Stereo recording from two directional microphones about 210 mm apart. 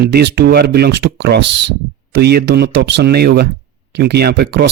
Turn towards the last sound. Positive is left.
turn(degrees=-50)  # may be behind; listen again after turning